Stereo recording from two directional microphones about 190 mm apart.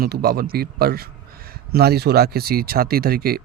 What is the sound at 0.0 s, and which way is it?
A man's voice, 55° right (ahead or behind).